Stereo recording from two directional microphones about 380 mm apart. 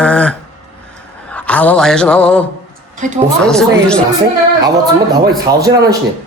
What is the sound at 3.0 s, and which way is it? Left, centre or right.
Speech, centre.